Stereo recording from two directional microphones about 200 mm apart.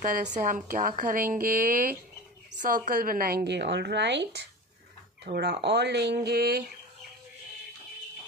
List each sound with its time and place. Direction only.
0.0 s a woman's voice: 40° right (ahead or behind)